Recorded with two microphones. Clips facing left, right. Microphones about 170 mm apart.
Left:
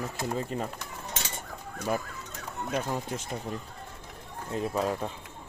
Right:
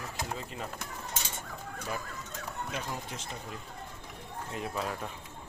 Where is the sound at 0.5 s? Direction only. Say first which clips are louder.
Left 7 dB; 45° left (ahead or behind).